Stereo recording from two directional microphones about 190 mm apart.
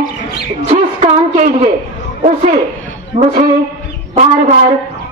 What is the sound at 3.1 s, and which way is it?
Speech, 40° right (ahead or behind).